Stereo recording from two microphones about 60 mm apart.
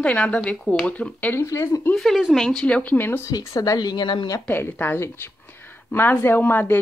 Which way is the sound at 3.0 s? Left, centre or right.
Left.